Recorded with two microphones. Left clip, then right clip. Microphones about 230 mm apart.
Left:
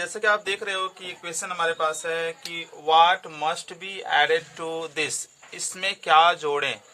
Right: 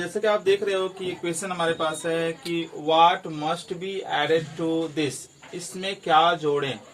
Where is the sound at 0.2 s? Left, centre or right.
Left.